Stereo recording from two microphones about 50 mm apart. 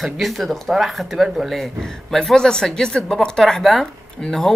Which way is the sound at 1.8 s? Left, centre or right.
Centre.